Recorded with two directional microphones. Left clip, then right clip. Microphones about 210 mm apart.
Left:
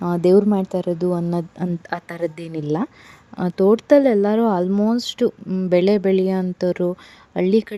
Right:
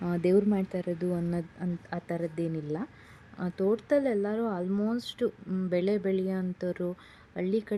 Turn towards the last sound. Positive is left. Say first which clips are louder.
# left 12 dB
turn(degrees=40)  # may be behind; listen again after turning